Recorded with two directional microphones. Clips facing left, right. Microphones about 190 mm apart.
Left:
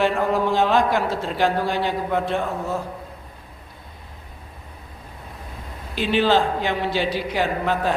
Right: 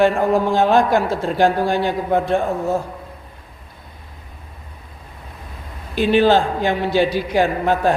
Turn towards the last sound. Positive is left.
turn(degrees=-50)  # may be behind; listen again after turning